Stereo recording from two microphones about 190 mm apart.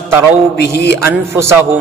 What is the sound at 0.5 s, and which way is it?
Speech, 60° left (ahead or behind).